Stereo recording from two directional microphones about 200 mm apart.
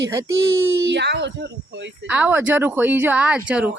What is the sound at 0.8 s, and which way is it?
Speech, 60° right (ahead or behind).